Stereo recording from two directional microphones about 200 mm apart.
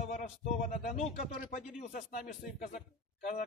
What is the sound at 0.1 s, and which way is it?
A man's voice, 45° left (ahead or behind).